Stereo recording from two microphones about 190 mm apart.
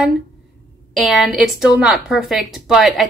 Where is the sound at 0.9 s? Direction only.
Centre (ahead or behind).